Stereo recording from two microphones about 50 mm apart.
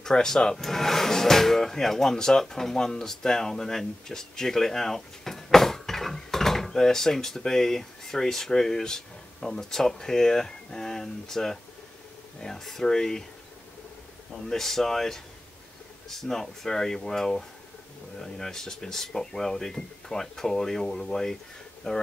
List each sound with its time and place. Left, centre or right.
0.0 s speech: centre
14.3 s speech: centre